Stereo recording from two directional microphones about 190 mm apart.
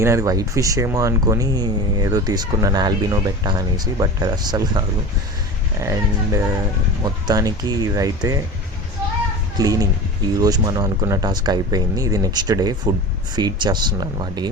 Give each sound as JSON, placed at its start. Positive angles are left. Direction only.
{"t": 0.0, "sound": "speech", "side_deg": -15}
{"t": 5.8, "sound": "speech", "side_deg": -15}
{"t": 9.6, "sound": "speech", "side_deg": -20}